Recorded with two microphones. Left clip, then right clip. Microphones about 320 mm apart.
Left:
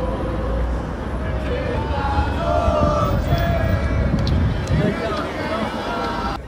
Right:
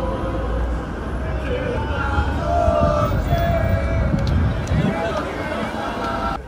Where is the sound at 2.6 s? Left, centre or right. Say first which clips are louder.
Right 3 dB; centre.